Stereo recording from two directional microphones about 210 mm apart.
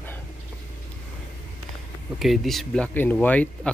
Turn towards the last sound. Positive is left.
turn(degrees=5)  # may be behind; listen again after turning